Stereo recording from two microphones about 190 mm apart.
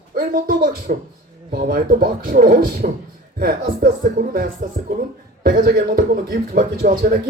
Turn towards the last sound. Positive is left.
turn(degrees=-45)  # may be behind; listen again after turning